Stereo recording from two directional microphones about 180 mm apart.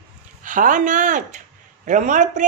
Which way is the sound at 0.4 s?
45° right (ahead or behind).